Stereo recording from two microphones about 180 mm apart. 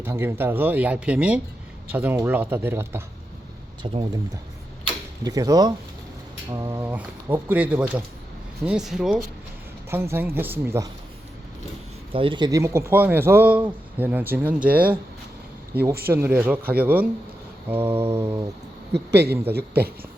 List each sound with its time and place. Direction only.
0.0 s speech: 15° right (ahead or behind)
3.8 s speech: 30° right (ahead or behind)
5.2 s speech: 20° right (ahead or behind); by 9.2 s centre (ahead or behind)
9.9 s speech: 15° right (ahead or behind)
12.1 s speech: 30° right (ahead or behind); by 14.9 s 10° right (ahead or behind)
16.1 s speech: 10° right (ahead or behind)
18.9 s a man's voice: 65° right (ahead or behind)